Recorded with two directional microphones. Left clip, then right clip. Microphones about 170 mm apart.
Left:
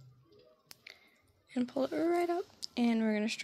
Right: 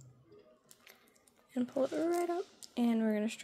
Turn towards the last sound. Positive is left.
turn(degrees=15)  # may be behind; listen again after turning